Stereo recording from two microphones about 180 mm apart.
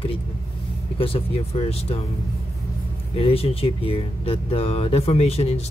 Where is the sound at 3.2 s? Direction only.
35° left (ahead or behind).